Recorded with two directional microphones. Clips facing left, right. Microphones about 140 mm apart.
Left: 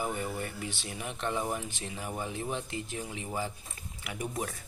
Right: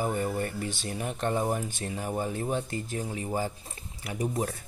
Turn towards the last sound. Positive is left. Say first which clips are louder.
# right 5 dB
turn(degrees=-35)  # may be behind; listen again after turning